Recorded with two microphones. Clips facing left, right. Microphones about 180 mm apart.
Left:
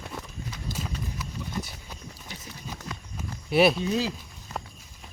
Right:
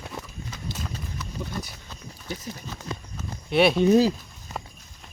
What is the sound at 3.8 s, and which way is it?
Speech, 45° right (ahead or behind).